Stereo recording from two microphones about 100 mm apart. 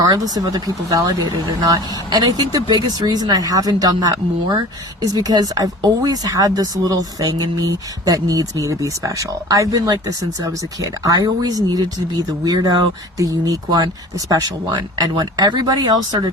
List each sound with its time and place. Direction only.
0.0 s speech: 40° right (ahead or behind)